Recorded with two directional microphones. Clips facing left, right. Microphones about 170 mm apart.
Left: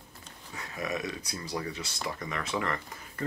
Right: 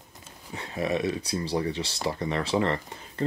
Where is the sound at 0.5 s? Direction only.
30° right (ahead or behind).